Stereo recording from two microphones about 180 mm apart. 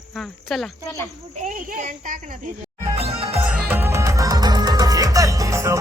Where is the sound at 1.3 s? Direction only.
45° right (ahead or behind).